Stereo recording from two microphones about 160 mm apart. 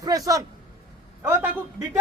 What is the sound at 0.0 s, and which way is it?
A man's voice, 20° right (ahead or behind).